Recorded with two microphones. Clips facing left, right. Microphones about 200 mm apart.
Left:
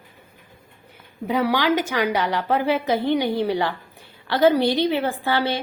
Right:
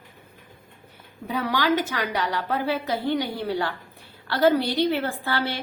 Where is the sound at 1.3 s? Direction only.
20° left (ahead or behind).